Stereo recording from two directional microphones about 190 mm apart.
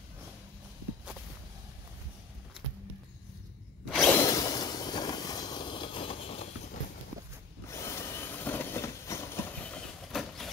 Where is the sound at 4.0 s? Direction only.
15° left (ahead or behind); by 6.5 s 30° left (ahead or behind).